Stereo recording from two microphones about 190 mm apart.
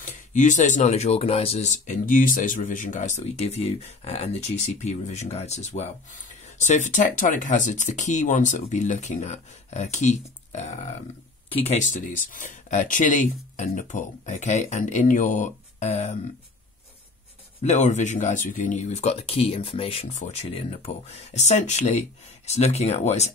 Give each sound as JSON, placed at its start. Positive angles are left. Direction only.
{"t": 0.0, "sound": "speech", "side_deg": 40}
{"t": 17.6, "sound": "speech", "side_deg": 40}